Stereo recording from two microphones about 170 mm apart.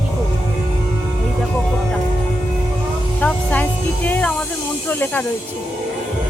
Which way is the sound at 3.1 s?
10° left (ahead or behind).